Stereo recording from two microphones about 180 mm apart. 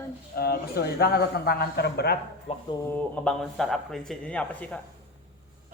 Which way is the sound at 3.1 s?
5° left (ahead or behind).